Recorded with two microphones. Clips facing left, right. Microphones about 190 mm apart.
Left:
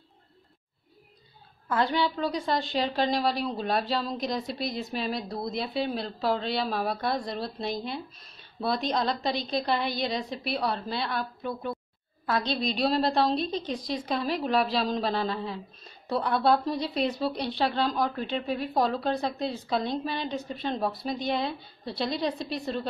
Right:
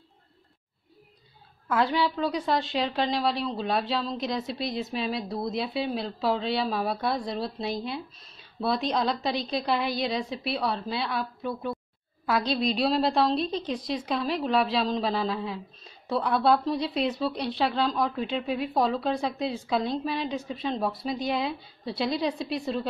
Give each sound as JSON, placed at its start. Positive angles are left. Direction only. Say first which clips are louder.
{"t": 1.7, "sound": "a woman's voice", "louder": "right 1 dB", "side_deg": -5}
{"t": 13.4, "sound": "a woman's voice", "louder": "right 1 dB", "side_deg": -30}
{"t": 13.9, "sound": "a woman's voice", "louder": "even", "side_deg": 0}